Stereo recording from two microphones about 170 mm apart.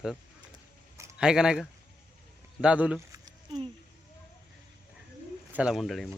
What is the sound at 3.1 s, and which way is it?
Keys jangling, 25° right (ahead or behind).